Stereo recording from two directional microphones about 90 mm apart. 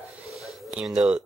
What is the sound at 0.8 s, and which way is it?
Speech, 5° right (ahead or behind).